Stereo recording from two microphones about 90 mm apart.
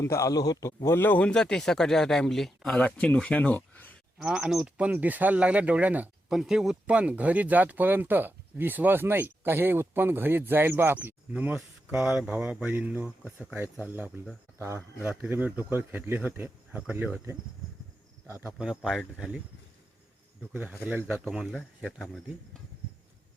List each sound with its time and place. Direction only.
0.0 s a man's voice: 35° left (ahead or behind)
0.9 s speech: 25° left (ahead or behind)
4.2 s speech: 5° right (ahead or behind)
6.2 s speech: 5° right (ahead or behind)
6.8 s speech: 15° right (ahead or behind)
14.6 s speech: 35° right (ahead or behind)
15.0 s speech: 15° right (ahead or behind)
18.6 s speech: 5° right (ahead or behind)
20.5 s speech: 20° right (ahead or behind)
21.1 s speech: 10° right (ahead or behind)